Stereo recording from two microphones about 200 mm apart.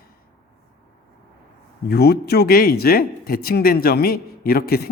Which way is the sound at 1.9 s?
50° left (ahead or behind).